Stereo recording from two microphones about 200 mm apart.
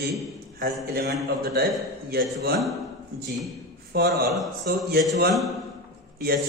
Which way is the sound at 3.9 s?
50° right (ahead or behind).